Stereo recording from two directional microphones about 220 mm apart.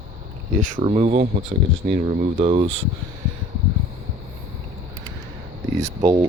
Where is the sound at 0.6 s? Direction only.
30° right (ahead or behind).